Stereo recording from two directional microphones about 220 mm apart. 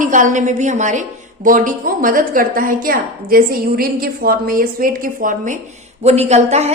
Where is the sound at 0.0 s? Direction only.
35° right (ahead or behind).